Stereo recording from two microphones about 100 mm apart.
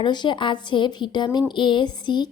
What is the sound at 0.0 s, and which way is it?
A woman's voice, 50° left (ahead or behind).